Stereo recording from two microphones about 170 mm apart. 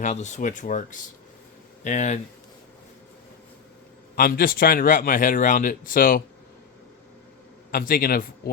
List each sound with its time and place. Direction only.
0.0 s speech: 45° left (ahead or behind)
4.1 s a man's voice: 60° left (ahead or behind)
7.7 s a man's voice: 60° left (ahead or behind)